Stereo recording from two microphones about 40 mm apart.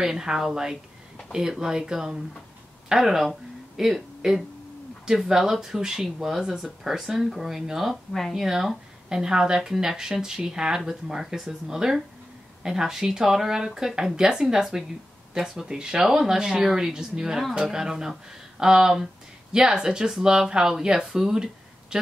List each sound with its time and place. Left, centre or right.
0.0 s speech: centre